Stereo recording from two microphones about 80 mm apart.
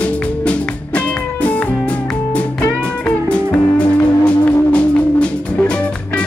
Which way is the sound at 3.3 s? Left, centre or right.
Centre.